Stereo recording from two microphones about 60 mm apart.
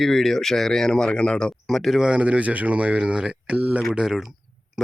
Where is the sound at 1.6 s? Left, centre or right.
Centre.